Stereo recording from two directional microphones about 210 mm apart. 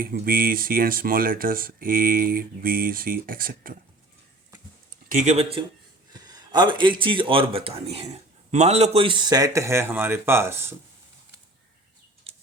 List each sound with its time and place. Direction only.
0.0 s speech: 45° right (ahead or behind)
5.1 s speech: 30° right (ahead or behind)
6.1 s a man's voice: 20° right (ahead or behind)
12.3 s a sound: 30° right (ahead or behind)